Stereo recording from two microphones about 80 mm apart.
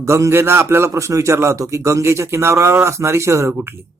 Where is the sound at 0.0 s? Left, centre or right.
Right.